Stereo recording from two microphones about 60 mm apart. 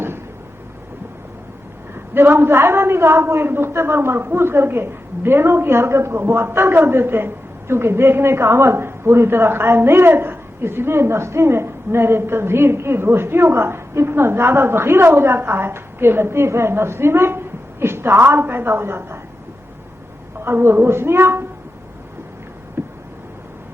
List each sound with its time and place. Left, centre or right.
2.1 s a woman's voice: right
20.4 s speech: right
22.8 s a sound: right